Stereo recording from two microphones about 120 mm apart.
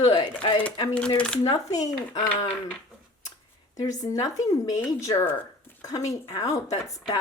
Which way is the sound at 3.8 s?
30° left (ahead or behind).